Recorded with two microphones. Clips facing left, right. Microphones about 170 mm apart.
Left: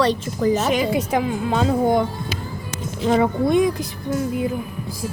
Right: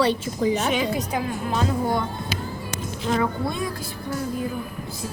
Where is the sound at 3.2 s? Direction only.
20° left (ahead or behind).